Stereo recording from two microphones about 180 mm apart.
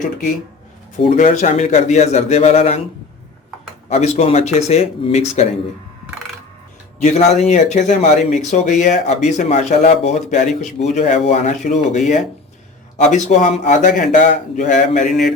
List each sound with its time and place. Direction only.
1.1 s speech: 40° left (ahead or behind)
3.8 s speech: 35° left (ahead or behind)
7.0 s a man's voice: 40° left (ahead or behind)